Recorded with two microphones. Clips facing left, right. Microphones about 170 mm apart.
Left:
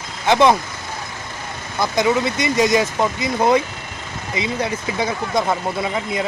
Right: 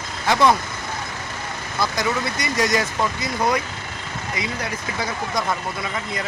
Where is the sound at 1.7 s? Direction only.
20° left (ahead or behind).